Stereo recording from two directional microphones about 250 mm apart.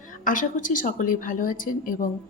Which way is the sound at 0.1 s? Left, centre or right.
Left.